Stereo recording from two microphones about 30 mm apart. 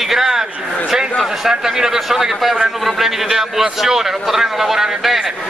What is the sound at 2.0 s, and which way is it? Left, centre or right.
A man's voice, centre.